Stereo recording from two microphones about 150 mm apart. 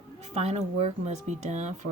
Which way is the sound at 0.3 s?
45° right (ahead or behind).